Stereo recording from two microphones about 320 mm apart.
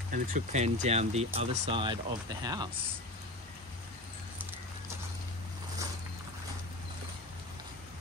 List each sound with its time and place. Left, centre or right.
0.1 s speech: right